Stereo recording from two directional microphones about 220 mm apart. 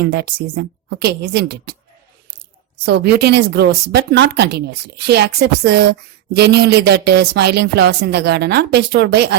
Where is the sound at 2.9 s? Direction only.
50° right (ahead or behind).